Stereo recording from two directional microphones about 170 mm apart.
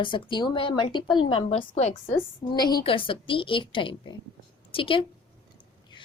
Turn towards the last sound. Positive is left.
turn(degrees=30)  # may be behind; listen again after turning